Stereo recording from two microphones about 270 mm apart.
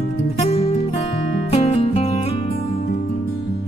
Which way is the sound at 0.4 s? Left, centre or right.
Left.